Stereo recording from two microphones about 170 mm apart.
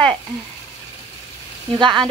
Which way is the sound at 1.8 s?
30° right (ahead or behind).